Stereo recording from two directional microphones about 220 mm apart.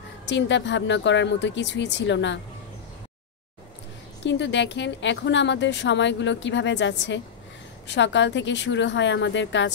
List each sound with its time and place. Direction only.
0.3 s speech: 55° left (ahead or behind)
4.2 s speech: 55° left (ahead or behind)